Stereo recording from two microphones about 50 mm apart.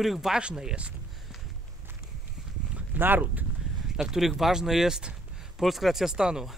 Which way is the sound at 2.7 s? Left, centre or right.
Right.